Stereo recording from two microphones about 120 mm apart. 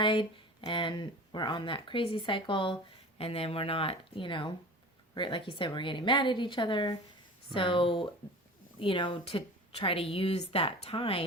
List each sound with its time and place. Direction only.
0.0 s a woman's voice: 40° left (ahead or behind)